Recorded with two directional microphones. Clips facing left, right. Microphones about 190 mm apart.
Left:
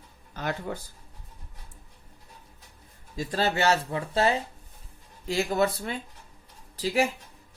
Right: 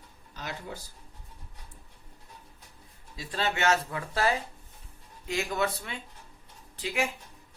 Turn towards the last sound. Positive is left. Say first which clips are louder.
# left 6 dB
turn(degrees=35)  # may be behind; listen again after turning